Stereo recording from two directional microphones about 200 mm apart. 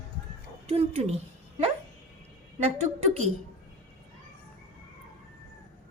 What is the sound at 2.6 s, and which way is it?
Speech, 35° right (ahead or behind).